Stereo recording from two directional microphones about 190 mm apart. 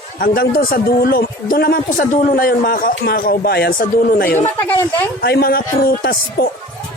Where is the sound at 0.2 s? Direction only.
50° left (ahead or behind).